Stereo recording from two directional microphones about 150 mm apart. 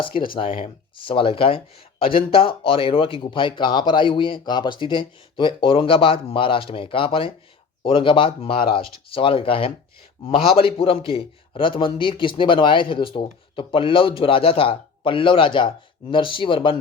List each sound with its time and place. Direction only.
0.3 s speech: 35° left (ahead or behind)